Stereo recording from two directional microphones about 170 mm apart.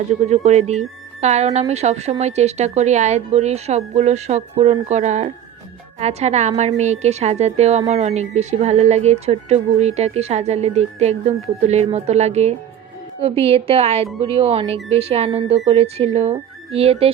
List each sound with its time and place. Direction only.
0.1 s a woman's voice: 40° right (ahead or behind)